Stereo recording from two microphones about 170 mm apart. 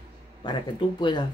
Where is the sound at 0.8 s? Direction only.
30° left (ahead or behind).